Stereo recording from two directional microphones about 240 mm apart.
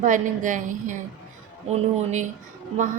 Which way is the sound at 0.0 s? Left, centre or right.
Right.